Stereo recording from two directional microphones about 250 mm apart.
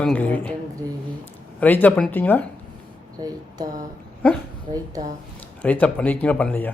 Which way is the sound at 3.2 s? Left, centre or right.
Centre.